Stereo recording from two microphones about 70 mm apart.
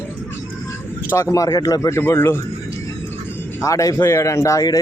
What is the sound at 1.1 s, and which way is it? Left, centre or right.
Speech, left.